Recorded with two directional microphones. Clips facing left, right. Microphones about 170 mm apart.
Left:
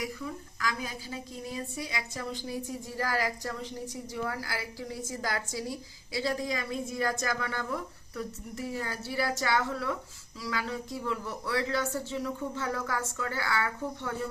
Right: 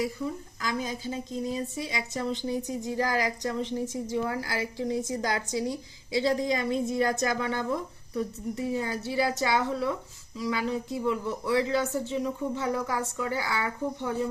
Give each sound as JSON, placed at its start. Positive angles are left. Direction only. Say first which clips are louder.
{"t": 0.6, "sound": "a woman's voice", "louder": "right 4 dB", "side_deg": -20}